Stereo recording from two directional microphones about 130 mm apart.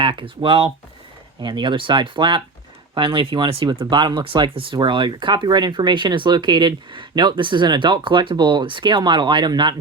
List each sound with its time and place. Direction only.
0.0 s speech: 40° right (ahead or behind)